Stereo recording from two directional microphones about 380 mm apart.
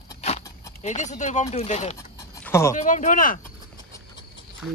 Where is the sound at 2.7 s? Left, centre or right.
Centre.